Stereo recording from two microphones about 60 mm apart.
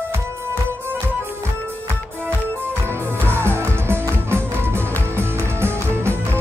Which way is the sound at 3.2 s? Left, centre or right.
Right.